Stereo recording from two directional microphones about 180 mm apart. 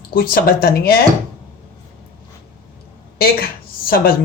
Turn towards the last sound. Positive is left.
turn(degrees=55)  # may be behind; listen again after turning